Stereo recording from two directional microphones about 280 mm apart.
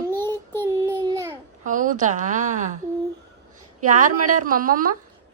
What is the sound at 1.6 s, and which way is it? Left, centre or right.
A woman's voice, right.